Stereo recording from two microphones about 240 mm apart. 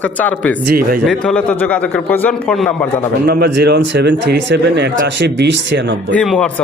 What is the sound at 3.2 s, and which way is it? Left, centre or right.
Speech, right.